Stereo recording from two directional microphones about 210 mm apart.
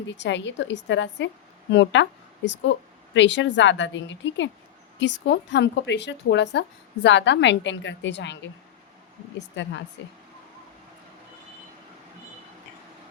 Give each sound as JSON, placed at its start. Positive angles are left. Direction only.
{"t": 0.1, "sound": "a woman's voice", "side_deg": 60}